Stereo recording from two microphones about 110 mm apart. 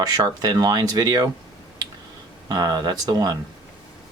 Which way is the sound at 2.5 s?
35° right (ahead or behind).